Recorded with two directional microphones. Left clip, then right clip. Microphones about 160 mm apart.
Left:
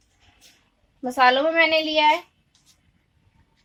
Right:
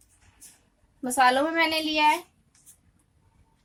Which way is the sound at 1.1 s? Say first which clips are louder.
Left 4 dB; 20° left (ahead or behind).